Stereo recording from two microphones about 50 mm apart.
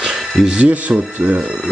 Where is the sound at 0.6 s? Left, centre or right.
Right.